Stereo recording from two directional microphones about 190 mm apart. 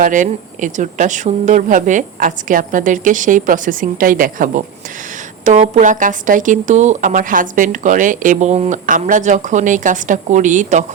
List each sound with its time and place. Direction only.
0.0 s a woman's voice: 45° right (ahead or behind)